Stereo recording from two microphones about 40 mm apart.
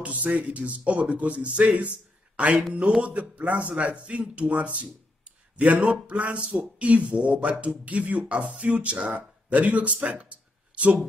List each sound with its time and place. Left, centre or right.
0.0 s speech: right